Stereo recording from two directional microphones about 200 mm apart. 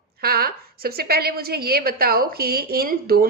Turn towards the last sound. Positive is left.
turn(degrees=-50)  # may be behind; listen again after turning